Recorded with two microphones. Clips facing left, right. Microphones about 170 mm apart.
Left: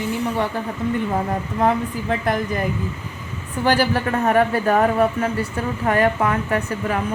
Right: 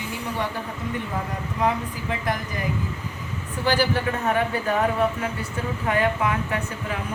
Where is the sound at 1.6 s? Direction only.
55° left (ahead or behind).